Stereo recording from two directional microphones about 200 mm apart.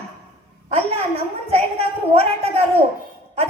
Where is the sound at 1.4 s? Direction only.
30° right (ahead or behind).